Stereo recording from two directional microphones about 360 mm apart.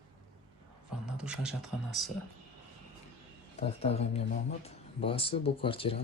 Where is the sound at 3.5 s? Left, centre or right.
Centre.